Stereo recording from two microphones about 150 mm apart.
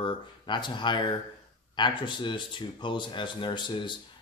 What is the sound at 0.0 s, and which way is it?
Speech, 30° left (ahead or behind).